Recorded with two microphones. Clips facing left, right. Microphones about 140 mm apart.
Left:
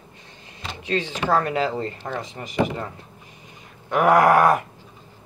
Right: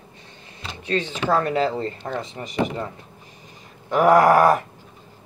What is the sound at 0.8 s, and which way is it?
Speech, 35° right (ahead or behind).